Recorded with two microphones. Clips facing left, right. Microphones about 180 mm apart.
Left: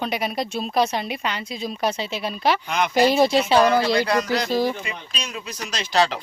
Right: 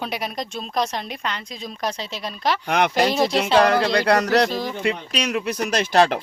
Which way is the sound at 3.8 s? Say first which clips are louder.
Right 2 dB; 65° right (ahead or behind).